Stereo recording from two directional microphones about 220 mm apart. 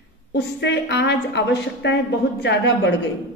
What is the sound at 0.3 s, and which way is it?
A woman's voice, 50° left (ahead or behind).